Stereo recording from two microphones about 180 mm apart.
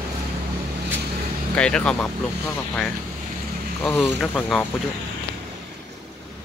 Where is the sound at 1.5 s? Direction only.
5° left (ahead or behind).